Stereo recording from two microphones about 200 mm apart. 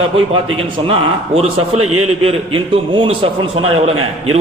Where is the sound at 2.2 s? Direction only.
25° right (ahead or behind).